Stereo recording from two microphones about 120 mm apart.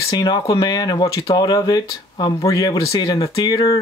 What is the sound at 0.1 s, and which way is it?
Speech, 35° left (ahead or behind).